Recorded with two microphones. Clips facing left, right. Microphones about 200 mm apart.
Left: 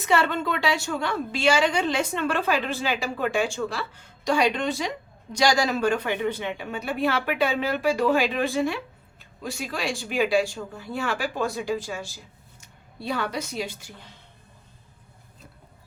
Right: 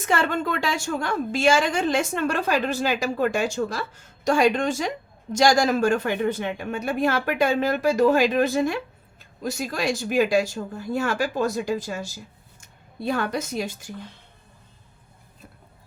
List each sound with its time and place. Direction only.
0.0 s a woman's voice: 45° right (ahead or behind)